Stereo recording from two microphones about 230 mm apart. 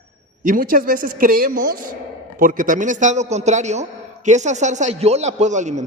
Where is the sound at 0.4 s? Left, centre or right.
Right.